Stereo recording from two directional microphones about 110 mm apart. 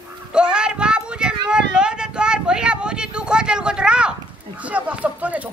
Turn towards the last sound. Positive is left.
turn(degrees=-15)  # may be behind; listen again after turning